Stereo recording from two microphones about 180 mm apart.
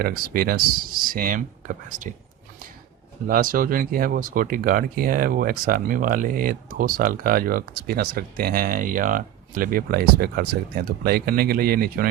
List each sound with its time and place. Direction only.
0.0 s speech: 55° right (ahead or behind)
3.2 s speech: 50° right (ahead or behind)